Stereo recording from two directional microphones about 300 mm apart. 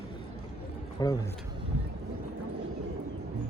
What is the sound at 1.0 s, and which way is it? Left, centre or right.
Speech, centre.